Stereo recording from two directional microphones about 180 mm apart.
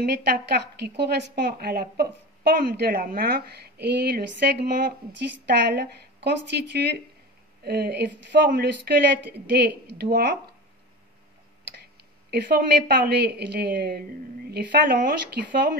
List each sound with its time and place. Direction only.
0.0 s a woman's voice: 65° right (ahead or behind)
9.7 s a woman's voice: 60° right (ahead or behind)
12.3 s a woman's voice: 60° right (ahead or behind)